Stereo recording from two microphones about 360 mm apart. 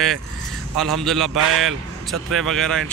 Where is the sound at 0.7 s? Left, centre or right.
Centre.